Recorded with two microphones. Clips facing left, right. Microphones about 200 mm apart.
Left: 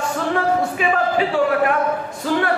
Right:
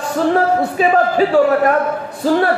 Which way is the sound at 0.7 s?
40° right (ahead or behind).